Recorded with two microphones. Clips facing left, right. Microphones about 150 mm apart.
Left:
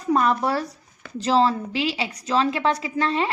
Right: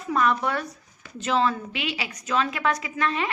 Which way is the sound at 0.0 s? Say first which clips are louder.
Left 3 dB; 35° left (ahead or behind).